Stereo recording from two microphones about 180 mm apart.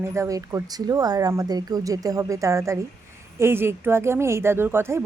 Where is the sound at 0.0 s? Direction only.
15° right (ahead or behind).